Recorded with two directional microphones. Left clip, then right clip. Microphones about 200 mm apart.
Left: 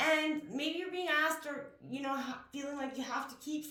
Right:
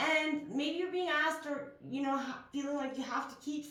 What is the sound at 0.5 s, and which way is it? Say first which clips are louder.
A woman's voice: right 2 dB; 40° left (ahead or behind).